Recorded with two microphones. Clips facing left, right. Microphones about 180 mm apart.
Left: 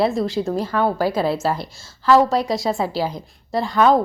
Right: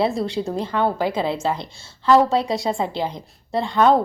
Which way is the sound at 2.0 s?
Centre (ahead or behind).